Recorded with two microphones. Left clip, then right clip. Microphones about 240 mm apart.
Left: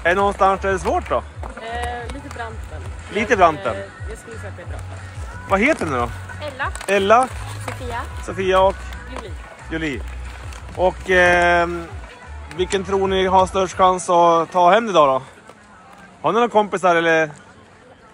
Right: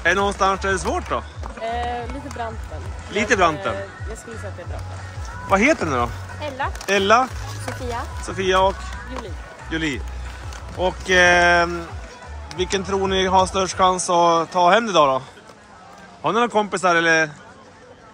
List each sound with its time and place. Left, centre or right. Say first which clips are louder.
0.0 s speech: left 2 dB; centre
1.6 s run: right 2 dB; right
2.4 s speech: right 2 dB; right
3.2 s speech: left 3 dB; centre
5.5 s speech: even; centre